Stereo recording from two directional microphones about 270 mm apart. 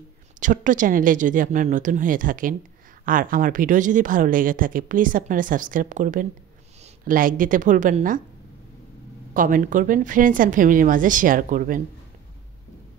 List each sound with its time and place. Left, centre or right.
0.4 s a woman's voice: right
9.3 s a woman's voice: right